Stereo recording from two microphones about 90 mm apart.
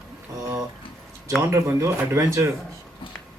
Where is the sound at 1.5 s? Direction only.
30° right (ahead or behind).